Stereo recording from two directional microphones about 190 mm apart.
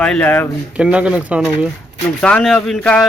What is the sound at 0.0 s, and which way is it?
Speech, 5° left (ahead or behind).